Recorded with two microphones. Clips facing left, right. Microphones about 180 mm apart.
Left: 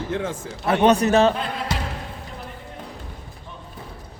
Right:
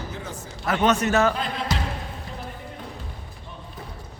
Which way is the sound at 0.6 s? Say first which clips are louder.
Left 4 dB; 30° left (ahead or behind).